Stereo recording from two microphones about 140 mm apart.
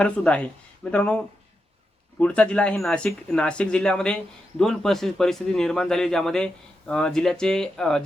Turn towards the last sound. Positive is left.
turn(degrees=5)  # may be behind; listen again after turning